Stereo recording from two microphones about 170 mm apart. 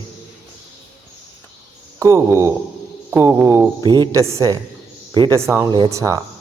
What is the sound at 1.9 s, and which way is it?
Speech, 15° right (ahead or behind).